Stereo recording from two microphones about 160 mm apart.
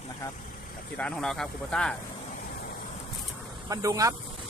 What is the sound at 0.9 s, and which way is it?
Speech, 5° left (ahead or behind).